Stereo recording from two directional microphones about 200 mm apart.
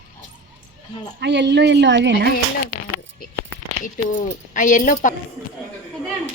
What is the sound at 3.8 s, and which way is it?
Speech, 40° left (ahead or behind).